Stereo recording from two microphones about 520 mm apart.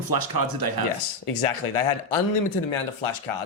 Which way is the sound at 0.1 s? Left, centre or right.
Right.